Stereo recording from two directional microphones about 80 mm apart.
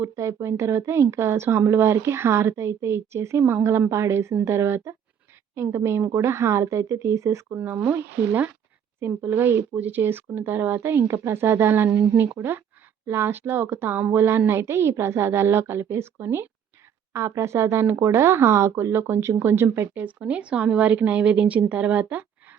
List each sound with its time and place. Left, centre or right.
0.0 s a woman's voice: right
7.6 s a woman's voice: right